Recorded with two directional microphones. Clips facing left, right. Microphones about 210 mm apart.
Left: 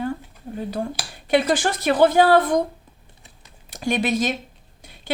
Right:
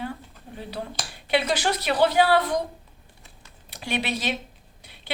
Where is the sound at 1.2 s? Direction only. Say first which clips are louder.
Left 4 dB; 50° left (ahead or behind).